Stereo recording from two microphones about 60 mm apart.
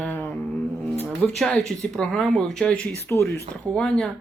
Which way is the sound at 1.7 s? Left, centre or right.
Centre.